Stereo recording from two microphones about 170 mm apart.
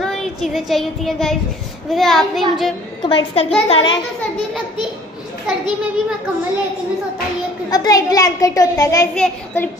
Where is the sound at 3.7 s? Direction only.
25° left (ahead or behind).